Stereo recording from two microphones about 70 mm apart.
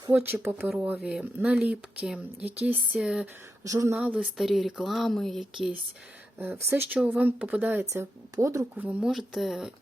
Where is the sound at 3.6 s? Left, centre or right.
Right.